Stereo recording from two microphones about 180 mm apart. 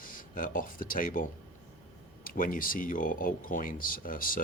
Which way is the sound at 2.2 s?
50° left (ahead or behind).